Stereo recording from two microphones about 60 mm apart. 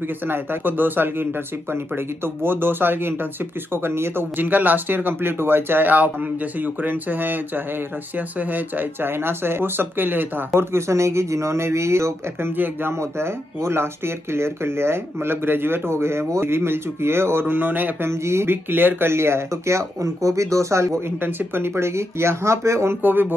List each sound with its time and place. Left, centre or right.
0.3 s speech: right
10.5 s speech: right
18.1 s speech: right
21.2 s speech: right